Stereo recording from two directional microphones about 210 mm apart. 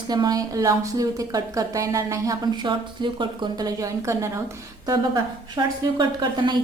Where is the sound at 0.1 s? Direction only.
20° right (ahead or behind).